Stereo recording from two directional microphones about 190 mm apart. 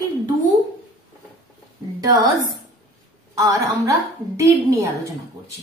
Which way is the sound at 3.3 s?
15° right (ahead or behind).